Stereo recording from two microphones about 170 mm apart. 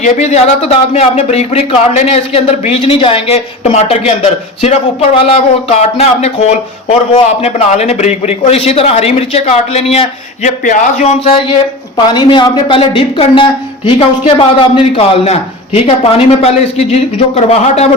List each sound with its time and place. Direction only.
0.0 s a man's voice: 40° left (ahead or behind)
12.1 s a woman's voice: 25° left (ahead or behind)